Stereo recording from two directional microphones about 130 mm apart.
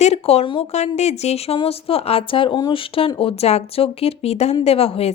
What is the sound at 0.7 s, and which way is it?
Speech, 60° left (ahead or behind).